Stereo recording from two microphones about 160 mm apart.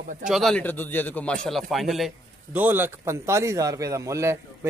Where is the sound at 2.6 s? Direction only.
10° right (ahead or behind).